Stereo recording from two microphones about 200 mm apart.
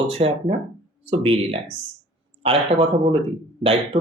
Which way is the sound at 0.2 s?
35° right (ahead or behind).